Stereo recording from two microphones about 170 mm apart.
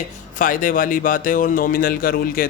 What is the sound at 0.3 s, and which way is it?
A man's voice, 50° left (ahead or behind).